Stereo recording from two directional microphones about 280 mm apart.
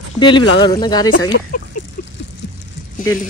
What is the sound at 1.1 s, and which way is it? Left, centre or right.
Speech, left.